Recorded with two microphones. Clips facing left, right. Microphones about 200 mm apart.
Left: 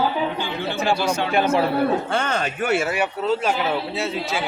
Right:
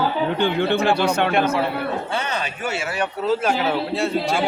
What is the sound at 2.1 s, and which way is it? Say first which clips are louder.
Speech: left 2 dB; 50° left (ahead or behind).